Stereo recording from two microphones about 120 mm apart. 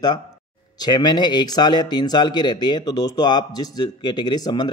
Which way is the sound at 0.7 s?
35° left (ahead or behind).